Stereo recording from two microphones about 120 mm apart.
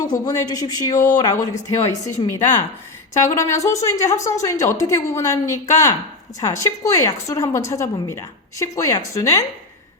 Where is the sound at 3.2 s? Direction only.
25° left (ahead or behind).